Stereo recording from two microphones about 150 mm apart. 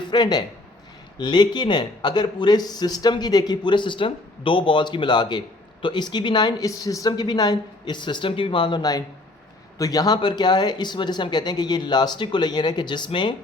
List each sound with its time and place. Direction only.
0.1 s speech: 25° left (ahead or behind)